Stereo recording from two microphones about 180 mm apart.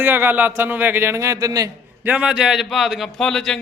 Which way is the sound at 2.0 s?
5° right (ahead or behind).